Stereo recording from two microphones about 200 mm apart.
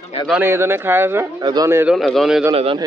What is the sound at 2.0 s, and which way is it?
Speech, centre (ahead or behind).